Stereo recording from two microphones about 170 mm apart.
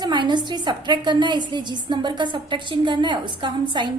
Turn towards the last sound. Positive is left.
turn(degrees=-30)  # may be behind; listen again after turning